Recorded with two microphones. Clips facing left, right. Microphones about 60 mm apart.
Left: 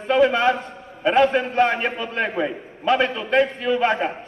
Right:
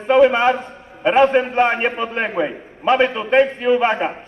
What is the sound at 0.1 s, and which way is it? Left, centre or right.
A man's voice, right.